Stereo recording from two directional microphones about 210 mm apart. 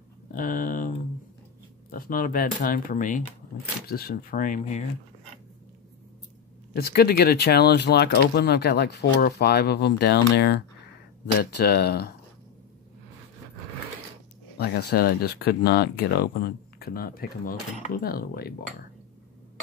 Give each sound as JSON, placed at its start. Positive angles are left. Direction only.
{"t": 0.3, "sound": "speech", "side_deg": 40}
{"t": 6.7, "sound": "speech", "side_deg": 50}
{"t": 14.6, "sound": "speech", "side_deg": 50}